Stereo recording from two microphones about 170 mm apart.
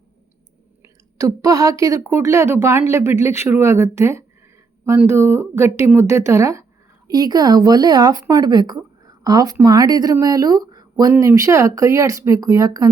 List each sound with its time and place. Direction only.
1.2 s speech: 20° right (ahead or behind)